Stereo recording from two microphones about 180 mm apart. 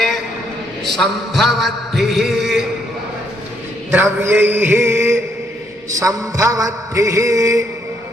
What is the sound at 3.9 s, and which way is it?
A man's voice, 10° right (ahead or behind).